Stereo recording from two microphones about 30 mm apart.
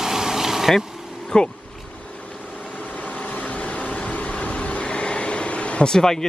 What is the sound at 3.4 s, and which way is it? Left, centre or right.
Vehicle, left.